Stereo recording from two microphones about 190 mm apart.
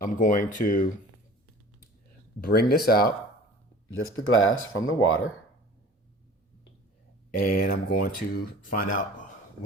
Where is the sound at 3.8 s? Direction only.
90° left.